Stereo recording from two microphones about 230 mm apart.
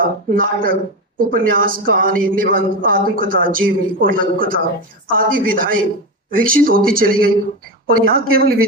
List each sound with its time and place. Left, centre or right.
0.0 s a man's voice: right